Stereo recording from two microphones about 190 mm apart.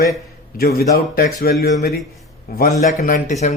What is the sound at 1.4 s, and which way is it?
Speech, 55° left (ahead or behind).